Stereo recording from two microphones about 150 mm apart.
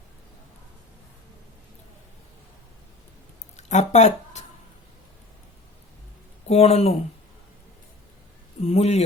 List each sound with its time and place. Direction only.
3.7 s speech: 50° left (ahead or behind)
6.5 s speech: 45° left (ahead or behind)
8.6 s speech: 45° left (ahead or behind)